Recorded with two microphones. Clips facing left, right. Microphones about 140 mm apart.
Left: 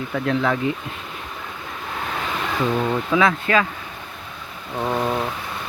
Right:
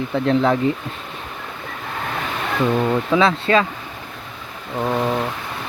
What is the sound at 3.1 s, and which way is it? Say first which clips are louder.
Speech: right 2 dB; 30° right (ahead or behind).